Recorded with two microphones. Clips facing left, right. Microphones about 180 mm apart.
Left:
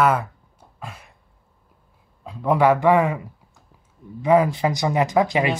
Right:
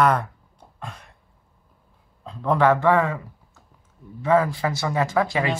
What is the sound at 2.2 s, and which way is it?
A man's voice, 10° left (ahead or behind).